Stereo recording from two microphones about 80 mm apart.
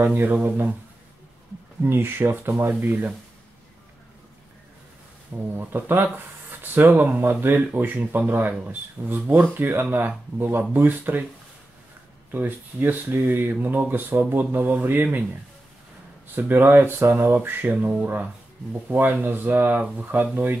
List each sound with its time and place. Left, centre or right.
0.0 s speech: right
1.8 s speech: right
5.6 s speech: right
12.3 s speech: right
16.3 s speech: right